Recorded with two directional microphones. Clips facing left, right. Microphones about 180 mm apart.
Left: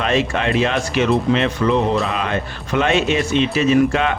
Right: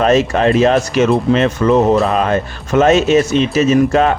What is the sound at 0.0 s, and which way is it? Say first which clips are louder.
Speech: right 7 dB; 40° right (ahead or behind).